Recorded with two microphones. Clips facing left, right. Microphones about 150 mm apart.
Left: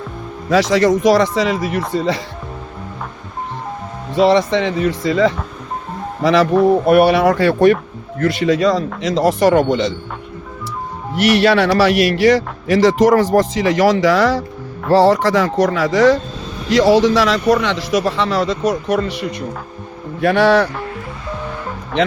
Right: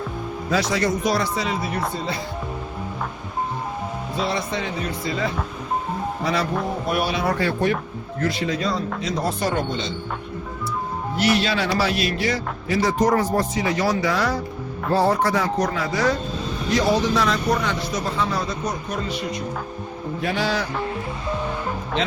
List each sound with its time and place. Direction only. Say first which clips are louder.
0.5 s speech: left 9 dB; 90° left
4.1 s speech: left 13 dB; 90° left
6.8 s speech: left 11 dB; 65° left (ahead or behind); by 9.9 s 85° left
11.2 s speech: left 9 dB; 70° left (ahead or behind)
20.2 s a man's voice: left 12 dB; 65° left (ahead or behind)